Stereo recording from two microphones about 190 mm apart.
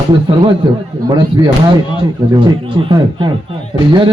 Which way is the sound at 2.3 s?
25° right (ahead or behind).